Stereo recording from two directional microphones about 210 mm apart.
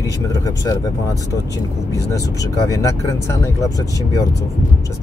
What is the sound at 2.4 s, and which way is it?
Speech, 15° left (ahead or behind).